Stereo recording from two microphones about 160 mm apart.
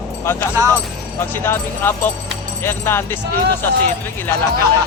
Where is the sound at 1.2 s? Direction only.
15° left (ahead or behind).